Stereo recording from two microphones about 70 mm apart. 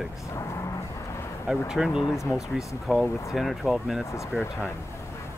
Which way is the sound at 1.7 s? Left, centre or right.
Centre.